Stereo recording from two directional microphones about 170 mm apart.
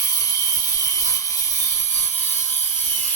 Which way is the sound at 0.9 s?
15° left (ahead or behind).